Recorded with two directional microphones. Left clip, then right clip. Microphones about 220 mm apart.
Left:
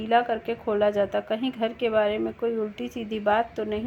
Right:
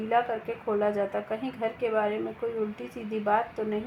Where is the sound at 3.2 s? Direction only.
55° left (ahead or behind).